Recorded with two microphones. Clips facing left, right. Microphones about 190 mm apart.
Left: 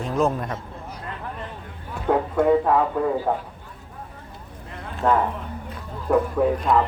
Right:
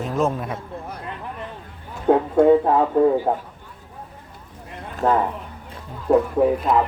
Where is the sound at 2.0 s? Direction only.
25° right (ahead or behind).